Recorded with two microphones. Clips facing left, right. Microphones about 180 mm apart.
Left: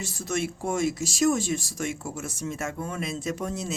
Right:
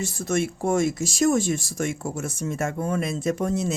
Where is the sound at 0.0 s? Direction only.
50° right (ahead or behind).